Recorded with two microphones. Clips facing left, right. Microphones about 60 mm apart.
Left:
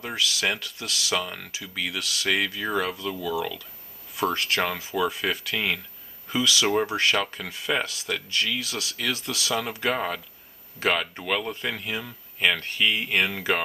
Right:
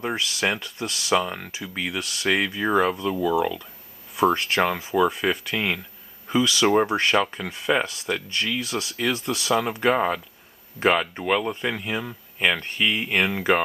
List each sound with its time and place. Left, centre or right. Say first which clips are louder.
0.0 s speech: right 2 dB; right
4.2 s speech: right 5 dB; centre
6.9 s speech: right 2 dB; right
7.3 s speech: right 4 dB; centre